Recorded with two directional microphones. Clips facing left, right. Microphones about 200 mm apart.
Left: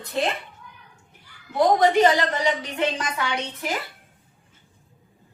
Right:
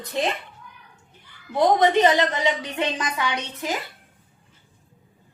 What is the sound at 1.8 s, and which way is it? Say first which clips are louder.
A woman's voice: even; 20° right (ahead or behind).